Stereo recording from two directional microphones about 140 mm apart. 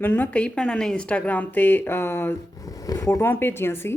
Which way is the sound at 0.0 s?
10° left (ahead or behind).